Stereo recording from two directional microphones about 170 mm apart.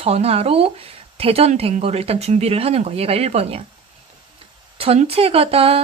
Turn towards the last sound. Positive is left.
turn(degrees=-35)  # may be behind; listen again after turning